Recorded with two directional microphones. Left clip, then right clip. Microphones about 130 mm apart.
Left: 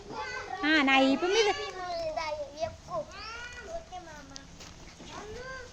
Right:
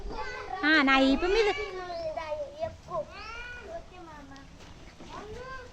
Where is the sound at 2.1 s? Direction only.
35° left (ahead or behind).